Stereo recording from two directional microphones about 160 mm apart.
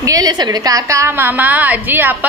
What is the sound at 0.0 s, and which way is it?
A woman's voice, 25° right (ahead or behind).